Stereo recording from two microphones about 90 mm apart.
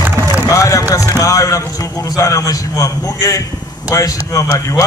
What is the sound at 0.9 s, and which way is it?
A man's voice, 40° left (ahead or behind).